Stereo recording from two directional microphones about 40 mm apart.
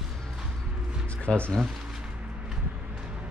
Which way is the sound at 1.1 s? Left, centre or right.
Left.